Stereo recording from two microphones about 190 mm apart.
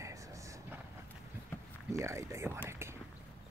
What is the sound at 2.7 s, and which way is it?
Whispering, 15° right (ahead or behind).